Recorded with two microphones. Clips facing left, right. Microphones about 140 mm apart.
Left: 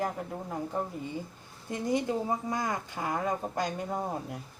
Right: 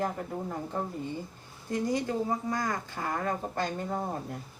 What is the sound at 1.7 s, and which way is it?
Speech, 20° left (ahead or behind).